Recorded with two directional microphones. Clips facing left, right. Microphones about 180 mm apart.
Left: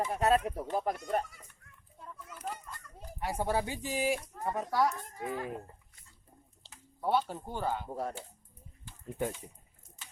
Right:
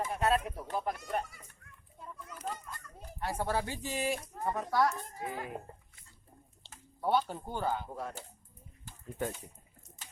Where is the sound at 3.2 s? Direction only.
15° left (ahead or behind).